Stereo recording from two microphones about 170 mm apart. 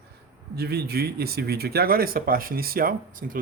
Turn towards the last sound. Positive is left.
turn(degrees=-55)  # may be behind; listen again after turning